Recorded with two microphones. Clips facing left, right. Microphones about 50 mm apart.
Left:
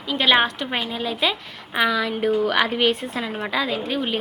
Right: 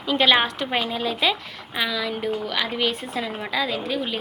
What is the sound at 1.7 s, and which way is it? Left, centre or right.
Speech, left.